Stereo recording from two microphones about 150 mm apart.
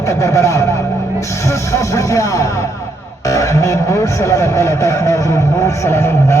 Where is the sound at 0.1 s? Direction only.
20° left (ahead or behind).